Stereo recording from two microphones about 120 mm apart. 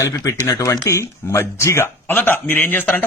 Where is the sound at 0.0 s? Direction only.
30° left (ahead or behind).